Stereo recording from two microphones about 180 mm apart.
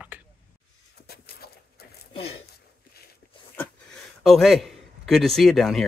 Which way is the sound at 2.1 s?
30° left (ahead or behind).